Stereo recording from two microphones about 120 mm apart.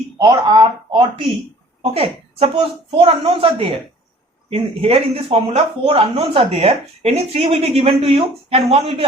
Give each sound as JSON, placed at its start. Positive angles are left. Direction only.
{"t": 0.2, "sound": "speech", "side_deg": -35}
{"t": 1.8, "sound": "a woman's voice", "side_deg": -55}